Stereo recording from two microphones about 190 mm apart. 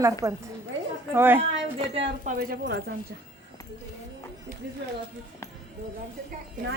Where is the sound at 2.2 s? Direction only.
50° right (ahead or behind).